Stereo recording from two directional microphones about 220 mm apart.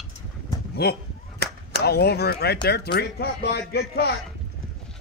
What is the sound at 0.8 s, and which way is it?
Speech, 45° left (ahead or behind).